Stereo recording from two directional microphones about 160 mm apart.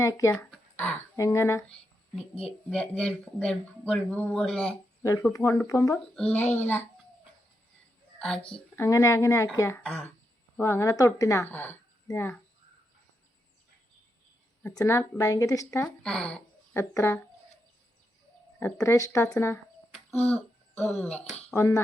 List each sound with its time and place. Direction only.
0.0 s speech: 20° left (ahead or behind)
2.1 s a child's voice: 35° left (ahead or behind)
2.6 s speech: 5° left (ahead or behind)
5.3 s speech: 15° left (ahead or behind)
6.1 s speech: 5° left (ahead or behind)
8.7 s speech: 15° left (ahead or behind)
14.8 s speech: 15° left (ahead or behind)
16.0 s a sound: 5° left (ahead or behind)
16.9 s speech: 15° left (ahead or behind)
18.6 s speech: 20° left (ahead or behind)
20.2 s a sound: 10° left (ahead or behind)
21.0 s speech: 10° left (ahead or behind)